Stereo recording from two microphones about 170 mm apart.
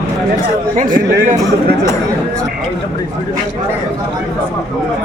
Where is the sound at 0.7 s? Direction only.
50° right (ahead or behind).